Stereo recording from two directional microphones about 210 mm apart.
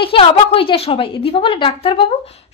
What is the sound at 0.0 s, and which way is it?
A woman's voice, 25° left (ahead or behind).